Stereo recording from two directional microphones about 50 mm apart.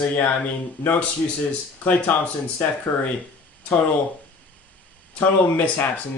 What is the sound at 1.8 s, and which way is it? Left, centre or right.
Speech, left.